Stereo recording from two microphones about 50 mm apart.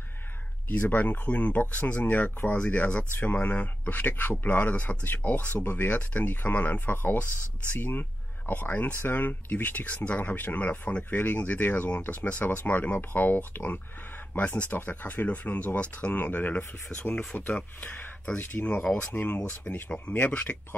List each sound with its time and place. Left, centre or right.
0.7 s speech: left
3.8 s speech: left
5.6 s speech: left
5.9 s speech: left
7.0 s speech: left
18.5 s speech: left